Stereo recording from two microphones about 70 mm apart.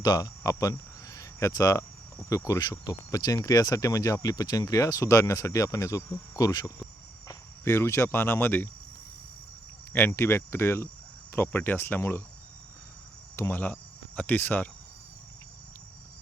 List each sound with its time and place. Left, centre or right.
0.0 s speech: left
2.3 s cricket: left
2.6 s speech: left
3.1 s speech: left
7.6 s speech: left
8.1 s speech: left
9.9 s speech: left
13.5 s speech: left